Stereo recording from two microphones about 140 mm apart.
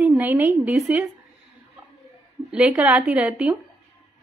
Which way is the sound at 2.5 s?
10° right (ahead or behind).